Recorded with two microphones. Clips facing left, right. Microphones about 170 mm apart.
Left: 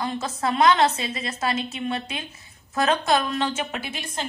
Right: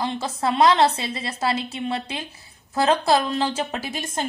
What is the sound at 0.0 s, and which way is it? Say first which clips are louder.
A woman's voice: right 2 dB; 30° right (ahead or behind).